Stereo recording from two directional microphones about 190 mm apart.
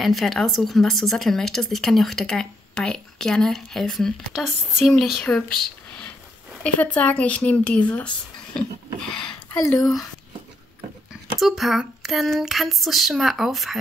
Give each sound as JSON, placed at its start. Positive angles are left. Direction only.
{"t": 0.0, "sound": "speech", "side_deg": 0}
{"t": 6.6, "sound": "speech", "side_deg": 5}
{"t": 8.5, "sound": "a sound", "side_deg": 5}
{"t": 9.5, "sound": "speech", "side_deg": 15}
{"t": 11.3, "sound": "speech", "side_deg": 0}